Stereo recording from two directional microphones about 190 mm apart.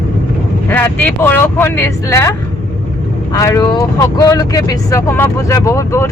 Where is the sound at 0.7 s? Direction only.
10° left (ahead or behind).